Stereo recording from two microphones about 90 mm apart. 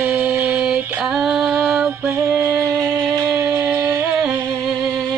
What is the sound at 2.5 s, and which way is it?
Music, 35° right (ahead or behind).